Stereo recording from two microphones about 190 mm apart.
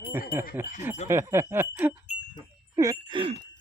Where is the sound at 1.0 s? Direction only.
15° right (ahead or behind).